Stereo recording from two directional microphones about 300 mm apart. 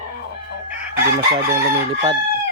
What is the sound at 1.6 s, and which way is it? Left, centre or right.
Crowing, right.